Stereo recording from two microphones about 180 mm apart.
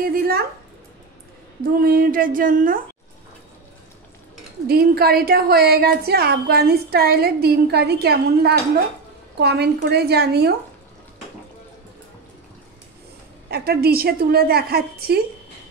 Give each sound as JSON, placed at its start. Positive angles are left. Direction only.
{"t": 0.0, "sound": "a woman's voice", "side_deg": -55}
{"t": 1.6, "sound": "speech", "side_deg": -55}
{"t": 4.6, "sound": "a woman's voice", "side_deg": -60}
{"t": 13.5, "sound": "a woman's voice", "side_deg": -60}